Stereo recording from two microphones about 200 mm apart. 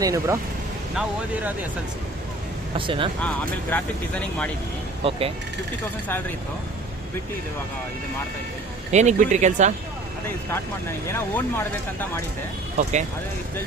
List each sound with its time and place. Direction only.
0.0 s speech: 15° right (ahead or behind)
2.7 s speech: 25° right (ahead or behind)
3.2 s speech: 5° left (ahead or behind)
5.0 s speech: 30° right (ahead or behind)
8.9 s speech: 35° right (ahead or behind)
10.2 s speech: 10° left (ahead or behind)
12.7 s speech: 35° right (ahead or behind)